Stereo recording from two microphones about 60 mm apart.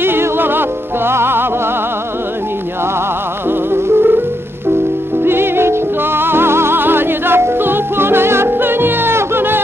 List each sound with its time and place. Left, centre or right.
0.0 s music: right
3.4 s music: right
5.2 s music: right